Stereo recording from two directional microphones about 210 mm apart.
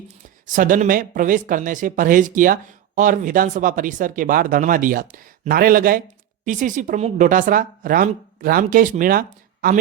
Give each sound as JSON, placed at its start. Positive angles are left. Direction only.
{"t": 0.4, "sound": "speech", "side_deg": -40}